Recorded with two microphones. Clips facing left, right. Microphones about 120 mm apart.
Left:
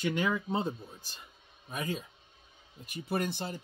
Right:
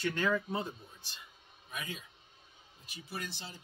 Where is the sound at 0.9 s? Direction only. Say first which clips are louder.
Left 3 dB; 45° left (ahead or behind).